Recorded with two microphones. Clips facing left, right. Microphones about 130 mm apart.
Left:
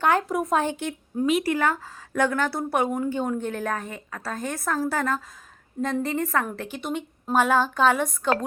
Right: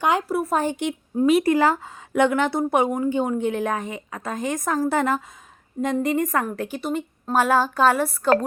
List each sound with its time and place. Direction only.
0.0 s a woman's voice: 15° right (ahead or behind)
1.5 s a woman's voice: 30° right (ahead or behind); by 8.4 s 5° right (ahead or behind)